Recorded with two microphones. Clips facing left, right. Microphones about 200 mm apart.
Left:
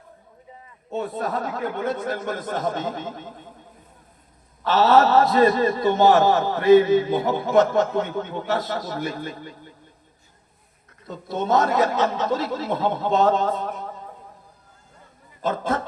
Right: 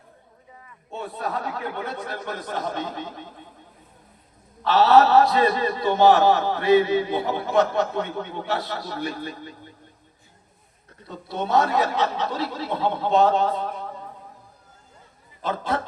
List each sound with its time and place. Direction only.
0.9 s a man's voice: 45° left (ahead or behind)
4.6 s a man's voice: 45° left (ahead or behind)
11.3 s a man's voice: 45° left (ahead or behind)
15.4 s speech: 45° left (ahead or behind)